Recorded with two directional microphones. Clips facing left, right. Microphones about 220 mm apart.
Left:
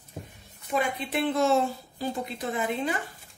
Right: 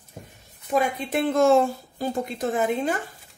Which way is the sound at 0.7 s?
45° right (ahead or behind).